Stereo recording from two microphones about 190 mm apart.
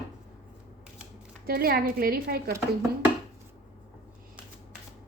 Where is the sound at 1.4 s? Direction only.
50° right (ahead or behind).